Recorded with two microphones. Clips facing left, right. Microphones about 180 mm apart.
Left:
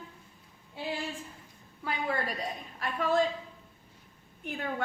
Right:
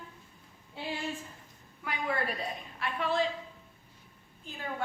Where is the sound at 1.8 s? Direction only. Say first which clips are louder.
Left 1 dB; 35° left (ahead or behind).